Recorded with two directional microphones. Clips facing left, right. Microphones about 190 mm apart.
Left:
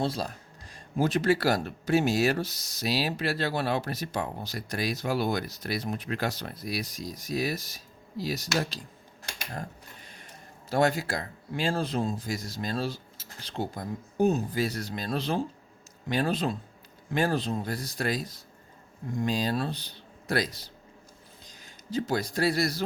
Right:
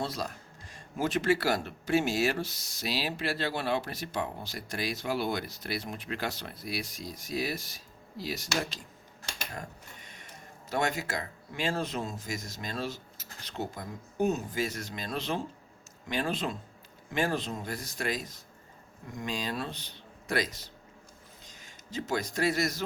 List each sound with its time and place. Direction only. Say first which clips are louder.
0.0 s speech: left 4 dB; 30° left (ahead or behind)
9.6 s mechanisms: left 3 dB; 35° left (ahead or behind)
10.7 s speech: left 5 dB; 35° left (ahead or behind)